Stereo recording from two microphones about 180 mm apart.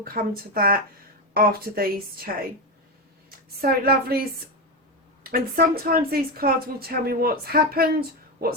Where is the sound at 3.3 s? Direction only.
55° right (ahead or behind).